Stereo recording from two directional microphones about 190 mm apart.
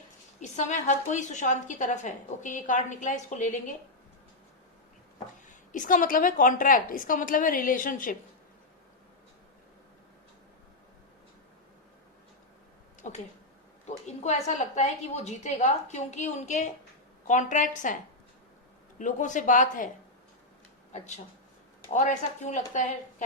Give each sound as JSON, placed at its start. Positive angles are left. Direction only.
{"t": 0.3, "sound": "a woman's voice", "side_deg": 40}
{"t": 5.7, "sound": "a woman's voice", "side_deg": 45}
{"t": 13.0, "sound": "a sound", "side_deg": 40}
{"t": 13.8, "sound": "a woman's voice", "side_deg": 35}
{"t": 21.9, "sound": "a woman's voice", "side_deg": 40}